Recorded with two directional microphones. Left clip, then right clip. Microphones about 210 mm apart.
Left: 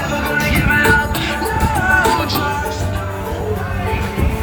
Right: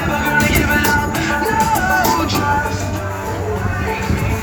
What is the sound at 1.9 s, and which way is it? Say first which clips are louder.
Music: left 1 dB; 75° right (ahead or behind).